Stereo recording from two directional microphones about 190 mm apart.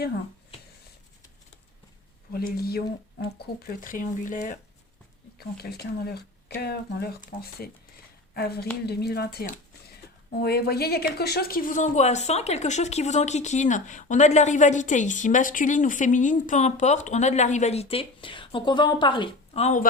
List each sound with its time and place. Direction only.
2.3 s speech: 55° left (ahead or behind)
5.4 s speech: 55° left (ahead or behind); by 19.9 s 40° left (ahead or behind)